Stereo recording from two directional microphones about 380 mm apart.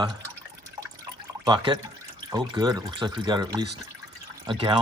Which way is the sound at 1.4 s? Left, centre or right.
Centre.